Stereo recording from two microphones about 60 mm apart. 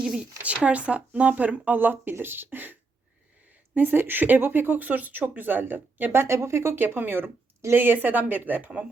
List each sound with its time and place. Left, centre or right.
0.0 s speech: centre; by 2.7 s right
3.8 s speech: right
6.1 s speech: right